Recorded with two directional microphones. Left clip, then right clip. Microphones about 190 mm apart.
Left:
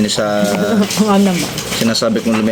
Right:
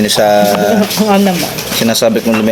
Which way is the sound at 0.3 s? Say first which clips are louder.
Right 6 dB; 5° right (ahead or behind).